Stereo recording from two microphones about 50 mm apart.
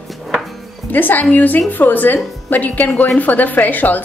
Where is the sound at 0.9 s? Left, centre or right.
Left.